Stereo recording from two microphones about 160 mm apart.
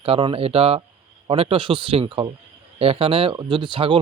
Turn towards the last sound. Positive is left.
turn(degrees=-30)  # may be behind; listen again after turning